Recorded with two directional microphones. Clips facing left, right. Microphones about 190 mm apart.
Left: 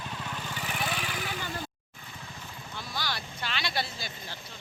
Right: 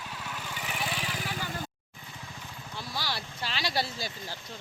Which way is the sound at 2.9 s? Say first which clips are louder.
Even; 30° right (ahead or behind).